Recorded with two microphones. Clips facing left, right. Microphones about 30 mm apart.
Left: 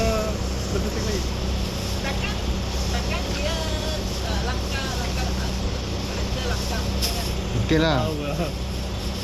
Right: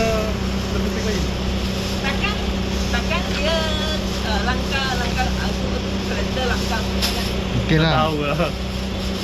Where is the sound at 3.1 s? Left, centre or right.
Right.